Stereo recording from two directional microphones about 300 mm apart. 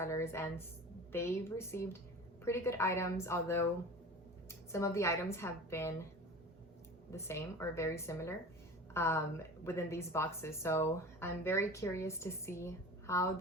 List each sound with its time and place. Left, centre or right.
0.0 s speech: centre
7.1 s speech: centre